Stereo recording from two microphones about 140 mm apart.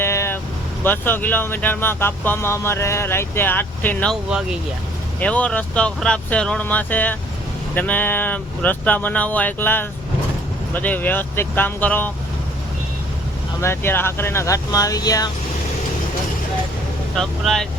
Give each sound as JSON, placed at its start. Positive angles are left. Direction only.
{"t": 0.0, "sound": "vehicle", "side_deg": 20}
{"t": 0.9, "sound": "speech", "side_deg": 15}
{"t": 4.1, "sound": "speech", "side_deg": -5}
{"t": 5.2, "sound": "speech", "side_deg": 10}
{"t": 13.6, "sound": "speech", "side_deg": 15}
{"t": 17.2, "sound": "speech", "side_deg": 5}